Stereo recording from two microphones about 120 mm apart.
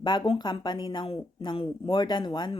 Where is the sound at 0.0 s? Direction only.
40° left (ahead or behind).